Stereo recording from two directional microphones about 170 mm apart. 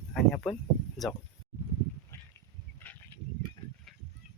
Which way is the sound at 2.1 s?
15° left (ahead or behind).